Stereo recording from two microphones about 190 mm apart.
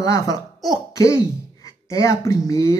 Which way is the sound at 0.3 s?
20° left (ahead or behind).